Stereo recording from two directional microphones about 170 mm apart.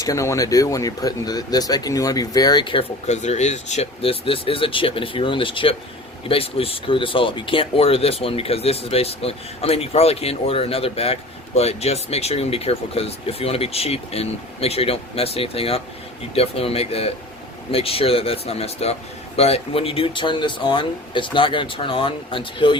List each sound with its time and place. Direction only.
0.0 s speech: 20° left (ahead or behind)
3.1 s speech: 40° left (ahead or behind)